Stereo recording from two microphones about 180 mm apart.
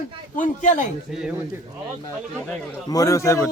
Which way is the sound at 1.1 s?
5° right (ahead or behind).